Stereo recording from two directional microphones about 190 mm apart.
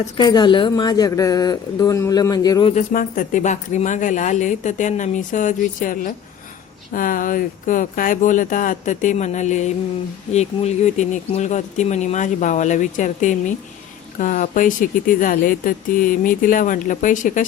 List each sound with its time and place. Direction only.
0.2 s speech: 20° left (ahead or behind)
2.7 s speech: 45° left (ahead or behind)